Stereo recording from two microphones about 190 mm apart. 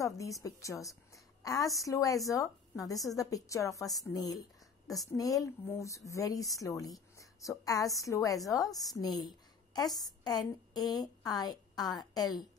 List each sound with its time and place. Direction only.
0.0 s a woman's voice: 15° left (ahead or behind)